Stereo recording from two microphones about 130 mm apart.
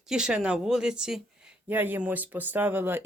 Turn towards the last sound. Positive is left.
turn(degrees=-15)  # may be behind; listen again after turning